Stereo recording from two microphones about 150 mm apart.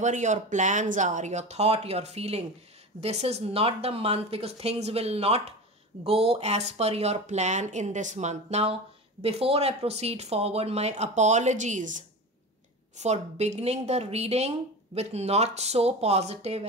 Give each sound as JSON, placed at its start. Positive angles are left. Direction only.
{"t": 0.0, "sound": "speech", "side_deg": -55}